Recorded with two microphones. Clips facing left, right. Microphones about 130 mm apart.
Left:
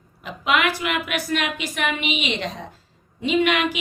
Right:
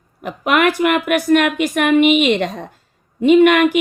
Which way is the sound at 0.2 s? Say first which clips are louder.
Right 6 dB; 55° right (ahead or behind).